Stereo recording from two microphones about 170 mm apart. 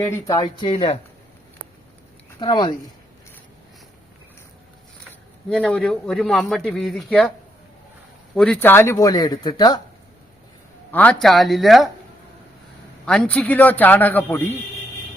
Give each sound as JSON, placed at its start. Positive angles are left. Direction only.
{"t": 0.0, "sound": "speech", "side_deg": 20}
{"t": 2.4, "sound": "speech", "side_deg": 25}
{"t": 5.5, "sound": "speech", "side_deg": 5}
{"t": 8.4, "sound": "speech", "side_deg": 10}
{"t": 10.9, "sound": "speech", "side_deg": 5}
{"t": 13.1, "sound": "a man's voice", "side_deg": 5}